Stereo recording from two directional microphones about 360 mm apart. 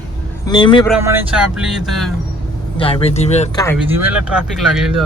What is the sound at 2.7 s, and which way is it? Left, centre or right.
Speech, centre.